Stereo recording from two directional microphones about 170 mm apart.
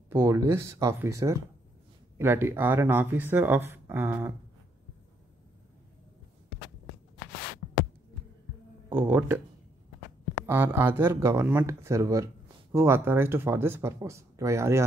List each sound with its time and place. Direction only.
0.1 s speech: 20° right (ahead or behind)
8.8 s speech: 10° right (ahead or behind)
10.4 s speech: 15° right (ahead or behind)